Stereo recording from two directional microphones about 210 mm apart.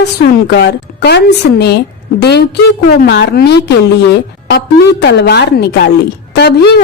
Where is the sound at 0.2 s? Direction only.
50° left (ahead or behind).